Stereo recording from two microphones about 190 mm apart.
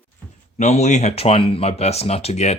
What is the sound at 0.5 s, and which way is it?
Speech, 35° left (ahead or behind).